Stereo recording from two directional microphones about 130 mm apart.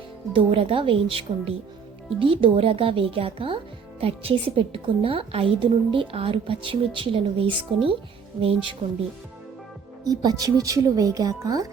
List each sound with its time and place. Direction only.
0.3 s a woman's voice: 45° right (ahead or behind)
10.0 s speech: 30° right (ahead or behind)